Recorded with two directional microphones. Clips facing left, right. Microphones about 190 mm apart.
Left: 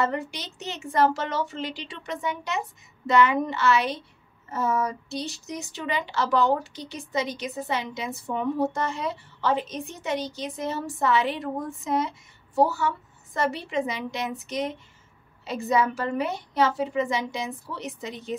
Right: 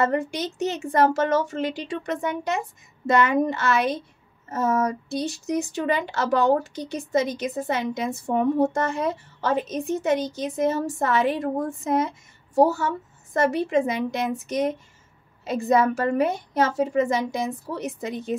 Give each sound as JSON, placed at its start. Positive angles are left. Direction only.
{"t": 0.0, "sound": "a woman's voice", "side_deg": -50}